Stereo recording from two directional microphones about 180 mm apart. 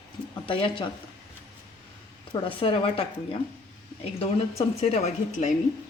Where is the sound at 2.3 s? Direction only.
30° left (ahead or behind).